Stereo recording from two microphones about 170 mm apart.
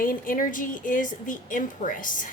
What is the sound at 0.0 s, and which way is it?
A woman's voice, 55° left (ahead or behind).